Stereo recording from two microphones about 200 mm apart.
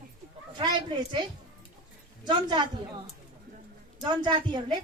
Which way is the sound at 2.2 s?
20° right (ahead or behind).